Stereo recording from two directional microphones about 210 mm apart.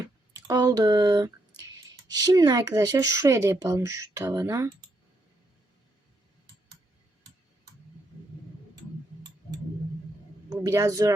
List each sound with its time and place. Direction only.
0.4 s speech: 15° right (ahead or behind)
10.5 s speech: 15° right (ahead or behind)